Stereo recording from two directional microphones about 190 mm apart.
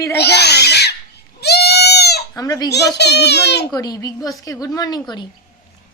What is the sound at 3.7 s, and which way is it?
Speech, 20° left (ahead or behind).